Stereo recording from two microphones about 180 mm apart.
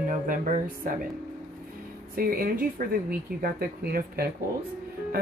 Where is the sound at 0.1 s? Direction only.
50° right (ahead or behind).